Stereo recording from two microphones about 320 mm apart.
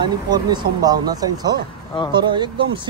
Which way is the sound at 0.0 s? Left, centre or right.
Centre.